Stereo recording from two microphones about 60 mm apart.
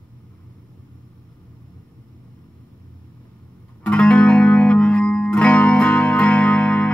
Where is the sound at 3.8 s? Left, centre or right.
Left.